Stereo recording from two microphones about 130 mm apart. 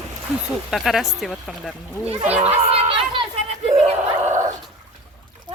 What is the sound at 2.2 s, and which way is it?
Speech, 10° right (ahead or behind).